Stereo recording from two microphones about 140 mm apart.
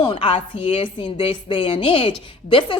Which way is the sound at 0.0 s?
40° left (ahead or behind).